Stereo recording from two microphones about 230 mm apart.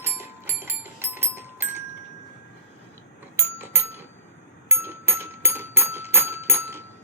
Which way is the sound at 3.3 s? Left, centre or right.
Centre.